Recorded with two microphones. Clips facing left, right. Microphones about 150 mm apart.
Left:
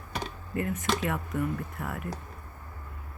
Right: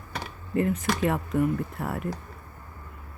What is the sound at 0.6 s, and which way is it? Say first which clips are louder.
Speech: right 6 dB; 30° right (ahead or behind).